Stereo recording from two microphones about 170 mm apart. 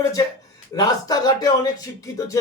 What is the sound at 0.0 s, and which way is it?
Speech, 20° left (ahead or behind).